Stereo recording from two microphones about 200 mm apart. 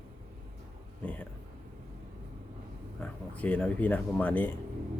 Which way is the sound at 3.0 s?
10° left (ahead or behind).